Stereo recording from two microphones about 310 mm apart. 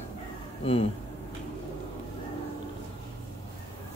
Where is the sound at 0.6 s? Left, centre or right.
Centre.